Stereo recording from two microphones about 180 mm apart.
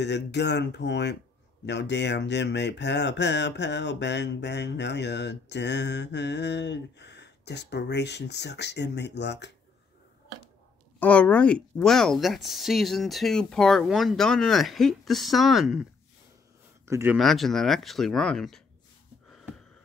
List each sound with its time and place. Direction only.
0.0 s speech: 70° left (ahead or behind)
11.0 s speech: 5° left (ahead or behind)
16.8 s speech: 15° right (ahead or behind)
17.2 s speech: centre (ahead or behind)
19.2 s a sound: centre (ahead or behind)